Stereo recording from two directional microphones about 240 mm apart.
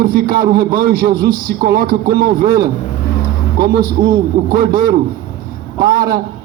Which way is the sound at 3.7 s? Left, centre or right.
Right.